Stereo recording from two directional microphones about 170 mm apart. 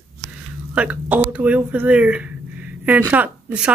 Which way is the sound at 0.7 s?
10° right (ahead or behind).